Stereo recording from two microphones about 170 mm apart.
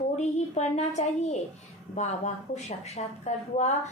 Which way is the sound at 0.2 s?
40° left (ahead or behind).